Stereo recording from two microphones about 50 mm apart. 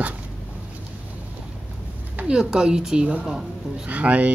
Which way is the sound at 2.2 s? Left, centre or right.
Centre.